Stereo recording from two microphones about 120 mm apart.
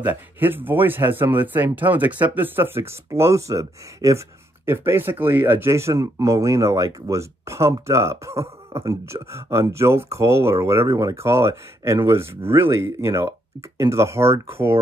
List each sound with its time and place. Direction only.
0.0 s speech: 15° right (ahead or behind)